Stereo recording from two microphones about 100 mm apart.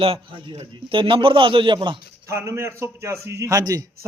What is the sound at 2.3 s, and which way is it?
A man's voice, 30° right (ahead or behind).